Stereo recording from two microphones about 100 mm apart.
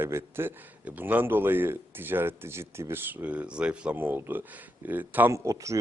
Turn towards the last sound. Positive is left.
turn(degrees=-30)  # may be behind; listen again after turning